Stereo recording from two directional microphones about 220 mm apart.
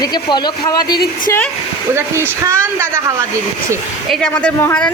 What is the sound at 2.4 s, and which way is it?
Speech, 10° right (ahead or behind).